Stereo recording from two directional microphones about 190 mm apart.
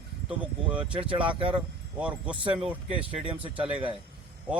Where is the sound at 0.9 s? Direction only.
25° right (ahead or behind).